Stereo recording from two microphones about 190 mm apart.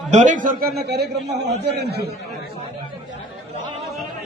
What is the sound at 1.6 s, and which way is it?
Speech, 60° right (ahead or behind).